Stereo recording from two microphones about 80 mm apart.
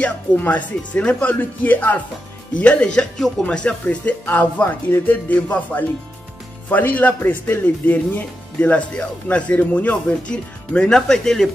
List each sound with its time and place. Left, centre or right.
0.0 s speech: centre